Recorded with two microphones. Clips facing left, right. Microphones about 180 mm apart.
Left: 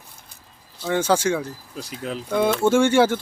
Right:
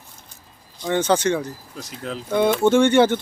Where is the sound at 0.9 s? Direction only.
5° left (ahead or behind).